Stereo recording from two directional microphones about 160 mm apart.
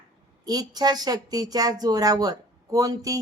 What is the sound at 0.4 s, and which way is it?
Speech, 25° right (ahead or behind).